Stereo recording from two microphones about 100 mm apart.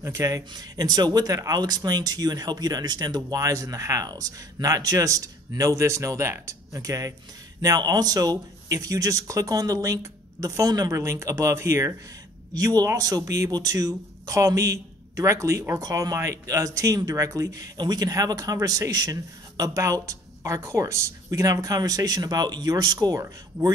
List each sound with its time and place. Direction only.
0.0 s speech: 35° right (ahead or behind)